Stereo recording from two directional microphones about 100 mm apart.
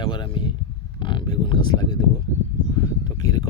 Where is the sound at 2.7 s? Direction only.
40° left (ahead or behind).